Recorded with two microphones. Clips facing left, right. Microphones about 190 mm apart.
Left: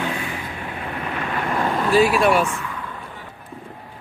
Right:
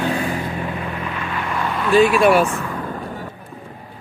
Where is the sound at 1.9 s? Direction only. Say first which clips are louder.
Right 4 dB; 5° left (ahead or behind).